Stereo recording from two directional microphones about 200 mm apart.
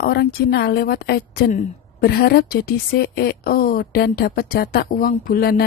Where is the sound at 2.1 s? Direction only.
55° left (ahead or behind).